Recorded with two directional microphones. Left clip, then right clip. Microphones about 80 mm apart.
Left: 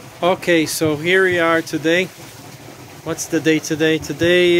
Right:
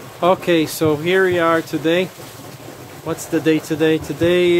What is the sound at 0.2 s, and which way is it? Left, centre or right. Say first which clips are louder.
Speech: right 1 dB; centre.